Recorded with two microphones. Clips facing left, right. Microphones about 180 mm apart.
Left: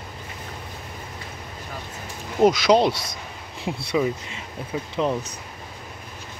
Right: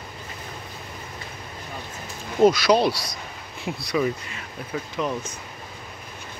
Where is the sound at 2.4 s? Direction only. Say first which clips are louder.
Even; 20° left (ahead or behind).